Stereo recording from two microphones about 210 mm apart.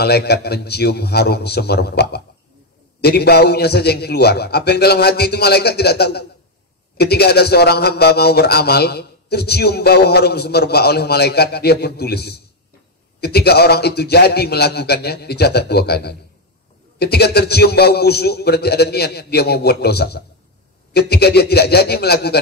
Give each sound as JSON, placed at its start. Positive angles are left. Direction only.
{"t": 0.0, "sound": "a man's voice", "side_deg": 50}